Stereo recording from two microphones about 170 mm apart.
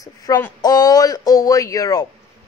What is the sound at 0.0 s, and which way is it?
Speech, 20° left (ahead or behind).